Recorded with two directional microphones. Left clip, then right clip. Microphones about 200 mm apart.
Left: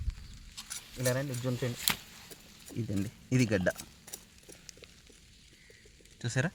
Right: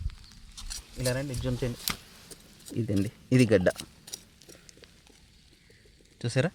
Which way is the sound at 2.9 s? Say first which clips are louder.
Right 7 dB; 45° right (ahead or behind).